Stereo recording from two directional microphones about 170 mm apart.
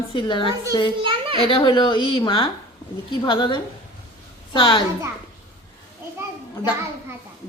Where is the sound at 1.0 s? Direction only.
30° right (ahead or behind).